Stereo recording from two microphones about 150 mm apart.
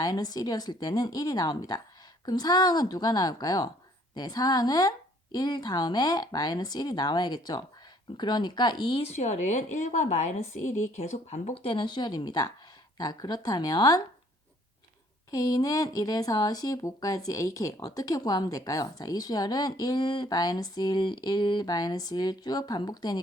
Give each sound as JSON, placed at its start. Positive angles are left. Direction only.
{"t": 0.0, "sound": "speech", "side_deg": 25}
{"t": 9.0, "sound": "speech", "side_deg": 45}
{"t": 15.3, "sound": "speech", "side_deg": 25}